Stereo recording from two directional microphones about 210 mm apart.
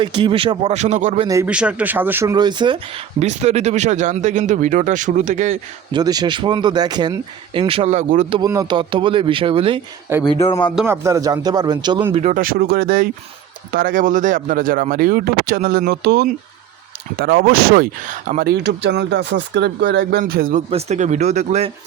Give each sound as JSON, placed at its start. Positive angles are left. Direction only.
{"t": 0.0, "sound": "speech", "side_deg": -20}
{"t": 1.3, "sound": "speech", "side_deg": -10}
{"t": 5.9, "sound": "speech", "side_deg": -20}
{"t": 8.4, "sound": "speech", "side_deg": -15}
{"t": 10.2, "sound": "speech", "side_deg": 20}
{"t": 10.8, "sound": "speech", "side_deg": -10}
{"t": 12.2, "sound": "speech", "side_deg": -40}
{"t": 20.7, "sound": "speech", "side_deg": -30}